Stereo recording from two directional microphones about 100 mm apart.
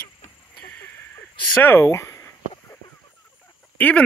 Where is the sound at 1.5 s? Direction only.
20° left (ahead or behind).